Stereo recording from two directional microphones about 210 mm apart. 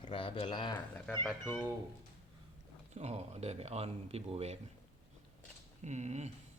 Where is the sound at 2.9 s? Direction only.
30° right (ahead or behind).